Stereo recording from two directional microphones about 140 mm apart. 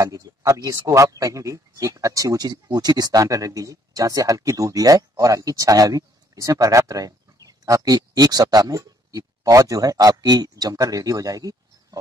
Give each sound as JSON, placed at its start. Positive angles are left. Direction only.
{"t": 0.0, "sound": "speech", "side_deg": -25}